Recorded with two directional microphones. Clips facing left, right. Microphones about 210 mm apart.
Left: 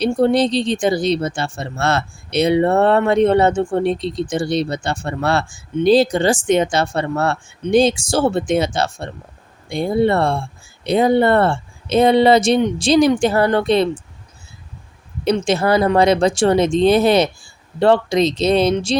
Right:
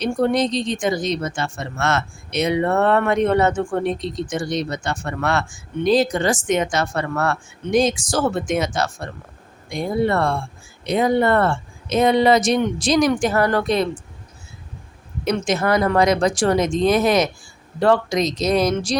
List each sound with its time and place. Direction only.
0.0 s speech: 30° left (ahead or behind)
15.2 s speech: 30° left (ahead or behind)